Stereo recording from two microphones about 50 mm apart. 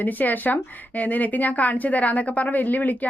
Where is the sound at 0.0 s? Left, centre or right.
Left.